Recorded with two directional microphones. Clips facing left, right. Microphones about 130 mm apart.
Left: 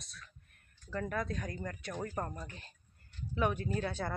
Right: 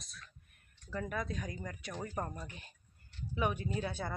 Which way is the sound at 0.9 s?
10° right (ahead or behind).